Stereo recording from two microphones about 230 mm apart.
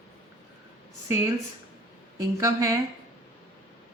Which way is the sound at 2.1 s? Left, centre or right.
Centre.